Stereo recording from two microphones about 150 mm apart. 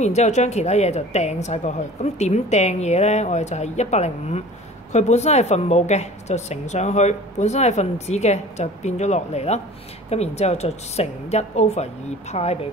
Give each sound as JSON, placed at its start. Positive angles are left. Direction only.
{"t": 0.0, "sound": "a woman's voice", "side_deg": 50}